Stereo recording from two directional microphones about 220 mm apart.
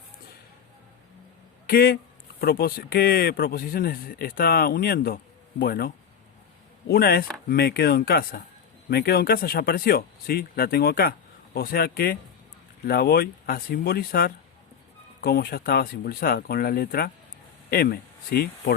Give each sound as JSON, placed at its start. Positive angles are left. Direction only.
{"t": 1.6, "sound": "speech", "side_deg": 40}